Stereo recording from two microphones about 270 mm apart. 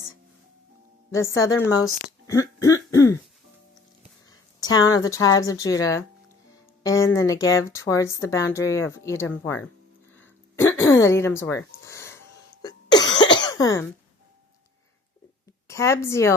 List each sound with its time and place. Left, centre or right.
1.1 s speech: centre
4.3 s a sound: centre
5.0 s speech: centre
10.2 s throat clearing: centre
11.9 s snort: centre
12.6 s cough: centre
15.6 s a woman's voice: centre